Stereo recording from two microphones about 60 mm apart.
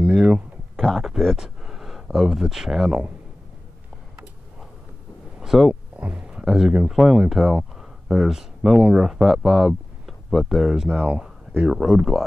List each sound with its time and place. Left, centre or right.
0.0 s a sound: centre
0.7 s speech: centre
1.3 s speech: centre
5.4 s speech: centre
5.9 s a sound: right
6.4 s speech: centre